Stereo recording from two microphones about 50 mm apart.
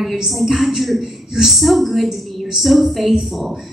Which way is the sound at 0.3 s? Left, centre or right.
Centre.